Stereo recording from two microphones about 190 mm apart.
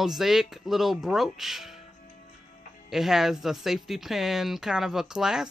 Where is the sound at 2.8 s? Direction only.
Centre (ahead or behind).